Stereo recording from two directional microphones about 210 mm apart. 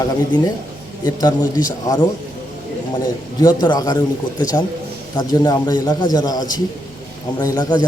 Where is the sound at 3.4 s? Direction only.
20° left (ahead or behind).